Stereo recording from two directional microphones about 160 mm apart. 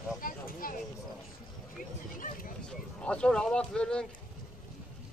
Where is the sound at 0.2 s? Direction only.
60° left (ahead or behind).